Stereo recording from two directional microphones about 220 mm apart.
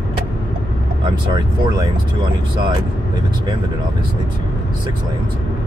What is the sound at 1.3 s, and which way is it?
Speech, 20° right (ahead or behind).